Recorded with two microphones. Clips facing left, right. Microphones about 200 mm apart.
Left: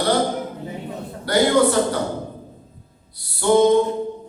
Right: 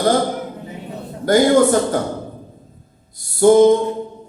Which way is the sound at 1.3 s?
45° right (ahead or behind).